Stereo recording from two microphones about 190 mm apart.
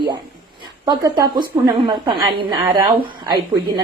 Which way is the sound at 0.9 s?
20° right (ahead or behind).